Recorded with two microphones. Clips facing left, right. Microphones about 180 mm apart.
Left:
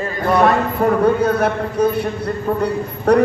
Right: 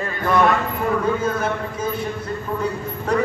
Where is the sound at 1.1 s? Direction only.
65° left (ahead or behind).